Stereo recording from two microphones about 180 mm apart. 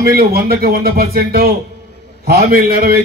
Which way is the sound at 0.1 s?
60° right (ahead or behind).